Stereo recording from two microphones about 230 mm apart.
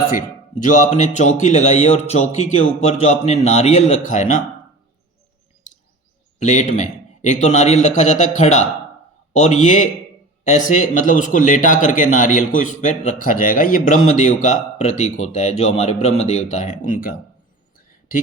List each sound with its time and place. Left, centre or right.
0.1 s a man's voice: left
5.7 s bird: left
6.4 s a man's voice: left